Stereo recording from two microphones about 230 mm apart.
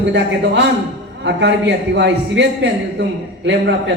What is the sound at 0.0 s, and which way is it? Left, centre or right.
A man's voice, right.